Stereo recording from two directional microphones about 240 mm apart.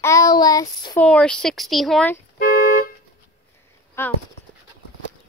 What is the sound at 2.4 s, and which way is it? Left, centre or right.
Car alarm, left.